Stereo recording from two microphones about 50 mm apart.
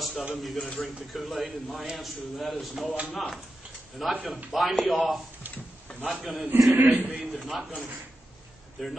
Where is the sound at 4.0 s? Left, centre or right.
Centre.